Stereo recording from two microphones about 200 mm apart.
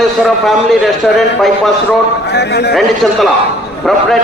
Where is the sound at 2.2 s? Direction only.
55° left (ahead or behind).